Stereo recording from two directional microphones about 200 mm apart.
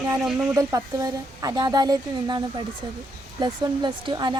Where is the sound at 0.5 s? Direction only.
15° right (ahead or behind).